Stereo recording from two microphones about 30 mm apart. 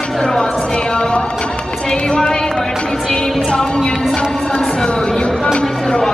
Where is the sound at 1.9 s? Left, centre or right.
Left.